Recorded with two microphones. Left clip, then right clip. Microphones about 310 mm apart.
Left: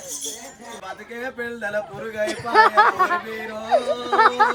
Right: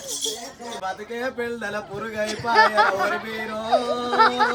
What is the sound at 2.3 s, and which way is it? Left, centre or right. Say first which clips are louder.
Speech: left 2 dB; centre.